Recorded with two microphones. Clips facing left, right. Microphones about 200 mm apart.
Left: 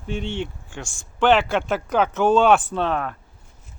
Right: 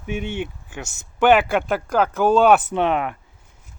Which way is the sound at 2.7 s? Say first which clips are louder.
Right 3 dB; 15° right (ahead or behind).